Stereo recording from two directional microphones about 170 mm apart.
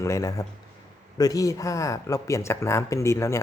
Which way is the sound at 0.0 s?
20° left (ahead or behind).